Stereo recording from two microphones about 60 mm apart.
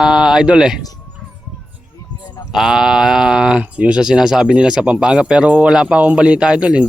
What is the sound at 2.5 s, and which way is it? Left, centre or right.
Speech, centre.